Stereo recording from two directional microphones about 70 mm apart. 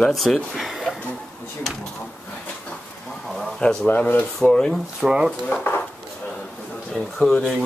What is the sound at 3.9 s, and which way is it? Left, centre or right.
Speech, left.